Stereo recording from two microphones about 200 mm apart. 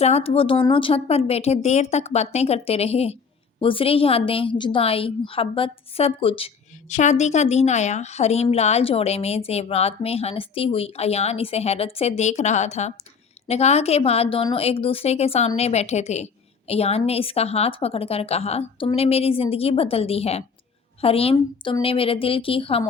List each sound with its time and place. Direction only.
0.0 s a woman's voice: 30° left (ahead or behind)